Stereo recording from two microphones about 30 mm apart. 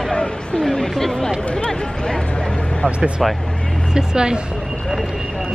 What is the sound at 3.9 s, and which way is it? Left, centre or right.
Speech, right.